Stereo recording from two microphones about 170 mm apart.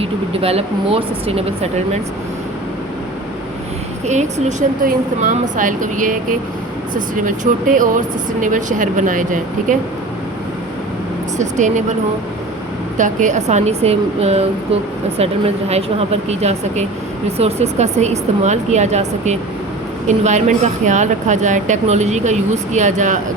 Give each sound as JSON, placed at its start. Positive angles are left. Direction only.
{"t": 0.0, "sound": "a woman's voice", "side_deg": -35}
{"t": 4.0, "sound": "speech", "side_deg": -40}
{"t": 7.3, "sound": "speech", "side_deg": -50}
{"t": 11.3, "sound": "speech", "side_deg": -45}
{"t": 13.0, "sound": "a woman's voice", "side_deg": -45}